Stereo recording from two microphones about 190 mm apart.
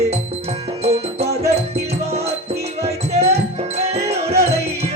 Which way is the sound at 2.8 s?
35° right (ahead or behind).